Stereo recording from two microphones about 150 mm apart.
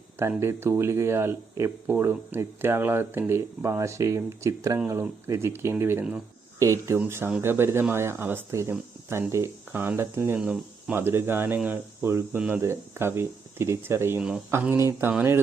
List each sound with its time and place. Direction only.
0.2 s speech: 15° right (ahead or behind)
14.2 s speech: 5° right (ahead or behind)